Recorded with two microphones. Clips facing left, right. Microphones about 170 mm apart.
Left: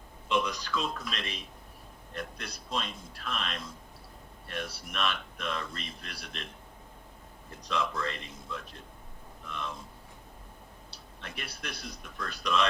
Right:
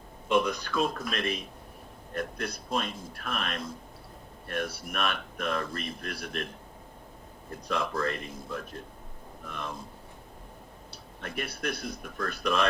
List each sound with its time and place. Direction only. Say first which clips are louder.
0.3 s speech: right 4 dB; 50° right (ahead or behind)
7.7 s speech: right 3 dB; 50° right (ahead or behind)
10.9 s speech: right 8 dB; 50° right (ahead or behind)